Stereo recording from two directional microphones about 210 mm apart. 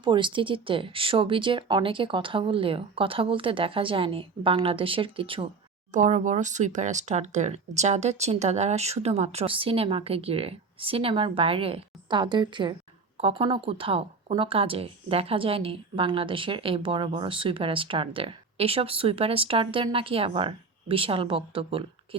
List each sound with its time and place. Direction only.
0.0 s speech: 25° right (ahead or behind)